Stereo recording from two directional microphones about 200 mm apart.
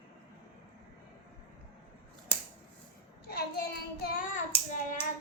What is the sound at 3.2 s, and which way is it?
Child singing, 50° left (ahead or behind).